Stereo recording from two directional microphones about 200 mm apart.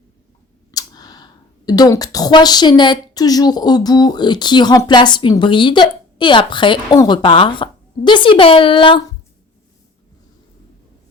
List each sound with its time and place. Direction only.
0.7 s speech: 20° left (ahead or behind)